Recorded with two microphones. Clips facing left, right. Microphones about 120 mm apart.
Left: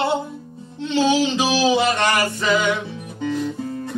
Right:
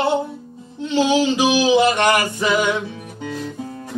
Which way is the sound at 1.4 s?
15° right (ahead or behind).